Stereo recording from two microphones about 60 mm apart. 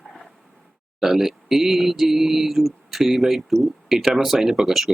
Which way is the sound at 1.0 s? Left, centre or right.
Centre.